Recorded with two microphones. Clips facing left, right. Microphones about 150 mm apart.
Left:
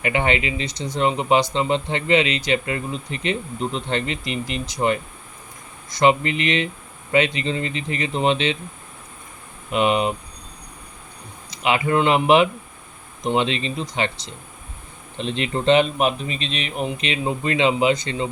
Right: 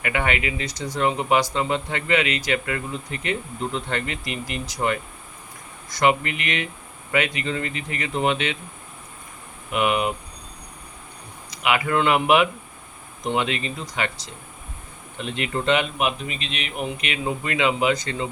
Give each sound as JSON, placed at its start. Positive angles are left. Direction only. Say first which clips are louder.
{"t": 0.0, "sound": "speech", "louder": "left 3 dB", "side_deg": 25}
{"t": 9.7, "sound": "speech", "louder": "left 3 dB", "side_deg": 25}
{"t": 11.5, "sound": "speech", "louder": "left 2 dB", "side_deg": 25}